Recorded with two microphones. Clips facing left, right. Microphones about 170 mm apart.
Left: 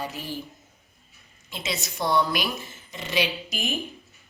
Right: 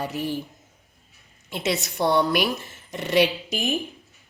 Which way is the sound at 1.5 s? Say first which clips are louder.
Right 6 dB; 65° right (ahead or behind).